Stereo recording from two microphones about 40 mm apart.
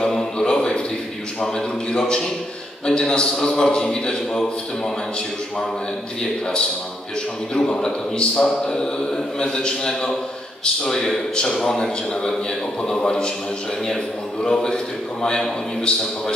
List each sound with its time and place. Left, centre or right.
0.1 s a sound: centre
1.4 s a man's voice: centre
7.5 s a man's voice: centre
14.4 s a man's voice: centre